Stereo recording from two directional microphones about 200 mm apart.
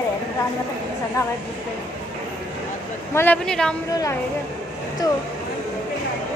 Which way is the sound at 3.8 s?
15° left (ahead or behind).